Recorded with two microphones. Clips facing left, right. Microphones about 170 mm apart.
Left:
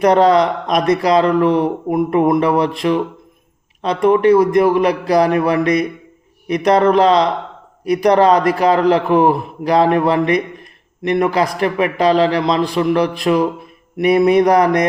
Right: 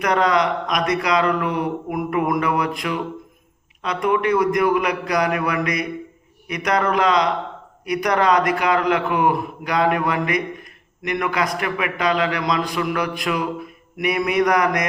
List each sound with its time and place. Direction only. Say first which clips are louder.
0.0 s a man's voice: left 7 dB; 30° left (ahead or behind)